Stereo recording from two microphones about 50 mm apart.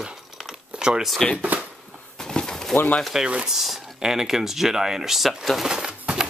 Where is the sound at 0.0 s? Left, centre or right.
Centre.